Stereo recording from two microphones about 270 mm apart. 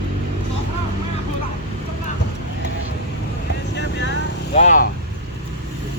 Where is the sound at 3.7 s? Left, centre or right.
Left.